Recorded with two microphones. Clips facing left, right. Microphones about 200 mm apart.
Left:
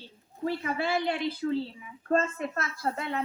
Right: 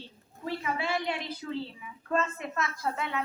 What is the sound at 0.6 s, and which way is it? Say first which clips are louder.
A woman's voice: left 1 dB; 40° left (ahead or behind).